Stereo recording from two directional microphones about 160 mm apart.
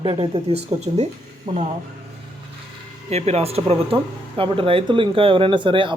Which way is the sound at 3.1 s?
40° right (ahead or behind).